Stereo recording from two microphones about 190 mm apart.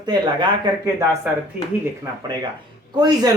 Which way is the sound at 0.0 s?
25° right (ahead or behind).